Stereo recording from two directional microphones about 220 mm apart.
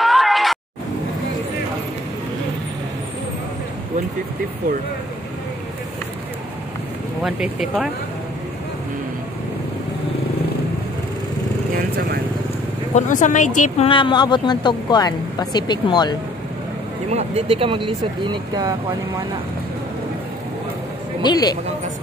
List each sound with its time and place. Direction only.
0.0 s a sound: centre (ahead or behind)
7.2 s speech: 5° right (ahead or behind)
12.9 s speech: 35° left (ahead or behind); by 16.2 s 20° left (ahead or behind)
17.1 s speech: 30° right (ahead or behind)
21.2 s speech: 20° left (ahead or behind)